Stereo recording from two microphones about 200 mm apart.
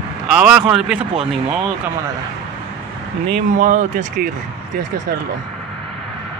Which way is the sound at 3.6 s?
40° right (ahead or behind).